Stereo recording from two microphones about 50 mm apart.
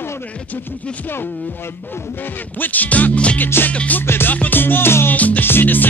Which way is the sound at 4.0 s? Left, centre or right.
Left.